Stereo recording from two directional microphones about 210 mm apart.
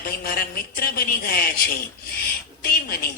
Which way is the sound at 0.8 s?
45° left (ahead or behind).